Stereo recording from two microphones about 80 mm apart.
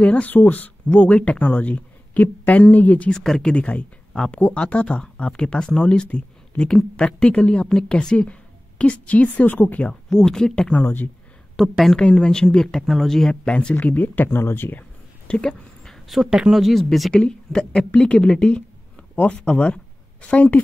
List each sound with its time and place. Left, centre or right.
0.0 s speech: centre
3.1 s speech: centre
10.0 s speech: centre
10.7 s speech: left
11.5 s a woman's voice: centre
12.0 s a woman's voice: centre
17.1 s speech: centre